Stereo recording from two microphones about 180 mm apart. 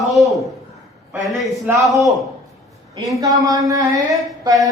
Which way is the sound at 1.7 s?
20° right (ahead or behind).